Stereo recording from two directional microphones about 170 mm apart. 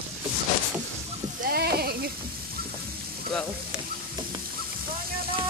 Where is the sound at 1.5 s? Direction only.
65° right (ahead or behind).